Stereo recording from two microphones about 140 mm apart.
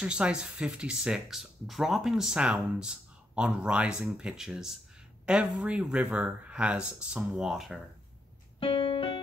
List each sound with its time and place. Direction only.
0.0 s speech: 5° right (ahead or behind)
8.5 s piano: 35° left (ahead or behind)